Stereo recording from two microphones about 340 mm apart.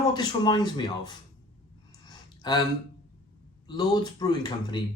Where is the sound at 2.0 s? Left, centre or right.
Centre.